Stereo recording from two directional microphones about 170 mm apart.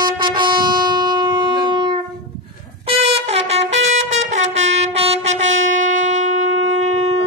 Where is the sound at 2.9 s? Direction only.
35° right (ahead or behind).